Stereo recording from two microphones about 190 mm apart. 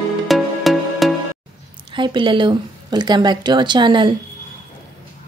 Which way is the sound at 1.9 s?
25° right (ahead or behind).